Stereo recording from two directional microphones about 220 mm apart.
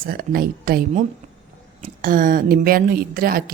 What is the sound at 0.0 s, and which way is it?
A woman's voice, 40° right (ahead or behind).